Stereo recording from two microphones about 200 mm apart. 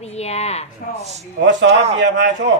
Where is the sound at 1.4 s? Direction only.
65° right (ahead or behind).